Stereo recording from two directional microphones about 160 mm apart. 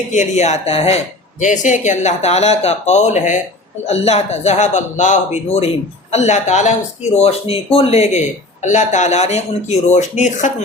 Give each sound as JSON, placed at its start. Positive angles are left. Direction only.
{"t": 0.1, "sound": "speech", "side_deg": 50}